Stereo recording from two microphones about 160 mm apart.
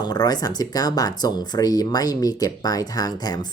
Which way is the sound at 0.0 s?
25° left (ahead or behind).